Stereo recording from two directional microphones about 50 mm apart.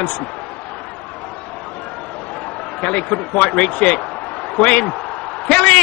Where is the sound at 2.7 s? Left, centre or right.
Left.